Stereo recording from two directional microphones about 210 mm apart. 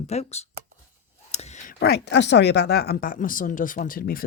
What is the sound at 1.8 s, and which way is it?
Speech, 50° left (ahead or behind).